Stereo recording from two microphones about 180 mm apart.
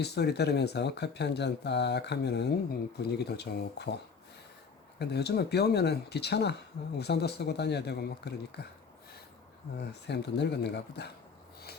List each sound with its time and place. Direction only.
0.0 s speech: 65° left (ahead or behind)
9.7 s speech: 70° left (ahead or behind)